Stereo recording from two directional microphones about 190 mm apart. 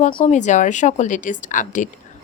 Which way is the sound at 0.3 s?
40° left (ahead or behind).